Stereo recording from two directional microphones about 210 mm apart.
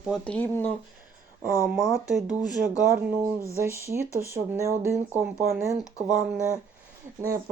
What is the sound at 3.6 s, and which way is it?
Speech, 10° right (ahead or behind).